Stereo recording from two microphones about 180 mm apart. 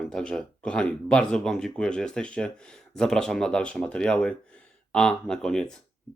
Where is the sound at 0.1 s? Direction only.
5° left (ahead or behind).